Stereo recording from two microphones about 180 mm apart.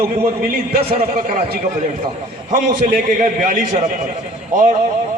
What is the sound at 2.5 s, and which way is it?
A man's voice, 50° right (ahead or behind).